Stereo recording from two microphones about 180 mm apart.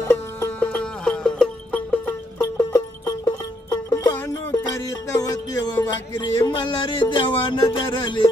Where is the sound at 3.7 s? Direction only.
20° left (ahead or behind).